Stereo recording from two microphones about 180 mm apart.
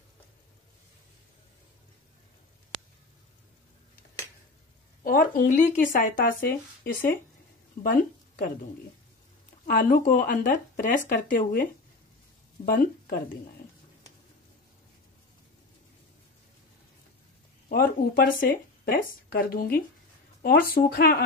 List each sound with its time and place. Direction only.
5.0 s speech: 50° left (ahead or behind)
9.7 s speech: 50° left (ahead or behind)
17.6 s speech: 55° left (ahead or behind)